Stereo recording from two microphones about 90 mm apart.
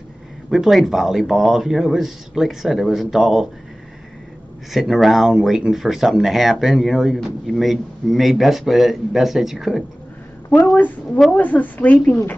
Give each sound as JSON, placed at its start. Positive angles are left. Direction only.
{"t": 0.5, "sound": "speech", "side_deg": 0}
{"t": 4.7, "sound": "speech", "side_deg": 0}
{"t": 11.3, "sound": "speech", "side_deg": 20}